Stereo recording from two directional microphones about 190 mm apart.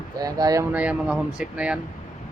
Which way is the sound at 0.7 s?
5° right (ahead or behind).